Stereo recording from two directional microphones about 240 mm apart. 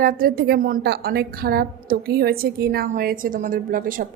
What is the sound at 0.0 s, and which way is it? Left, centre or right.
A woman's voice, right.